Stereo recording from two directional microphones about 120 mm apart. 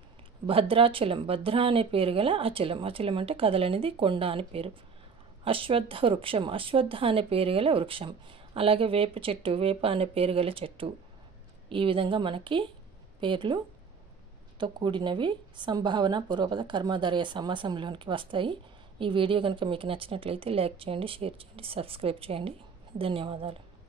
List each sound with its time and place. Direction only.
0.5 s a woman's voice: 50° right (ahead or behind)
14.6 s a woman's voice: 40° right (ahead or behind)